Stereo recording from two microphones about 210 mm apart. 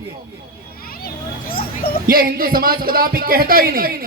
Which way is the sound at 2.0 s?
45° right (ahead or behind).